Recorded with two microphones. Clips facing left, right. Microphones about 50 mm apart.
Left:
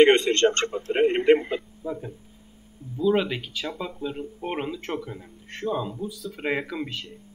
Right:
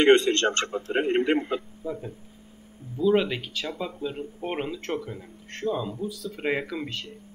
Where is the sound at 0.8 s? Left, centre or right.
Left.